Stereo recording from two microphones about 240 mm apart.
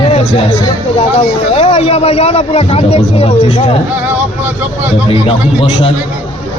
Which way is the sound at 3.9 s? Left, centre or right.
Centre.